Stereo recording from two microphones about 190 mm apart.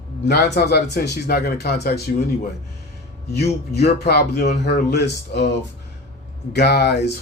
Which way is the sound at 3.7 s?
60° left (ahead or behind).